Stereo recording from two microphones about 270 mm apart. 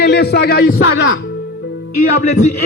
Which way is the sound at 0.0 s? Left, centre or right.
Left.